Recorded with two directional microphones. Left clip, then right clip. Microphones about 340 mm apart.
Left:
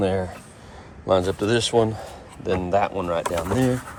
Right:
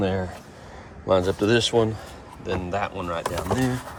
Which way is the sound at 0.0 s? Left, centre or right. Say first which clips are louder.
Left 3 dB; centre.